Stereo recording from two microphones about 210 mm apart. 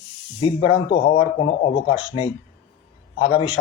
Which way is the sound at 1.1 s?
25° left (ahead or behind).